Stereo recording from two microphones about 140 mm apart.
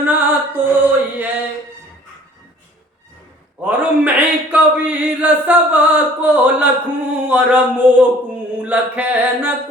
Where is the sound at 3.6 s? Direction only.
10° right (ahead or behind).